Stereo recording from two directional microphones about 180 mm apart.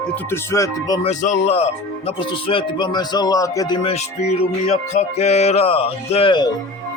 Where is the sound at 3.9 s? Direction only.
35° left (ahead or behind).